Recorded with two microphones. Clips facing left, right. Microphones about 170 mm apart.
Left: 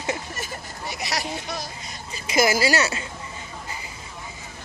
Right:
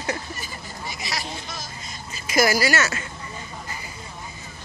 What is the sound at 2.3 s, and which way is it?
Speech, 25° left (ahead or behind).